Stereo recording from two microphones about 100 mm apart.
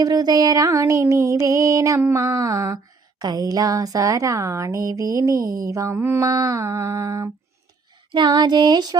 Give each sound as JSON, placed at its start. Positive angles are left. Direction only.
{"t": 0.0, "sound": "speech", "side_deg": -40}
{"t": 6.0, "sound": "mantra", "side_deg": -25}
{"t": 6.2, "sound": "speech", "side_deg": -40}
{"t": 8.1, "sound": "a sound", "side_deg": -50}